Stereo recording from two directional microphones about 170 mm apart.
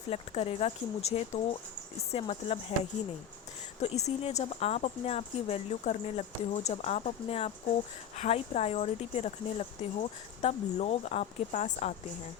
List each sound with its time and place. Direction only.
0.1 s speech: 35° left (ahead or behind)
3.8 s speech: 40° left (ahead or behind)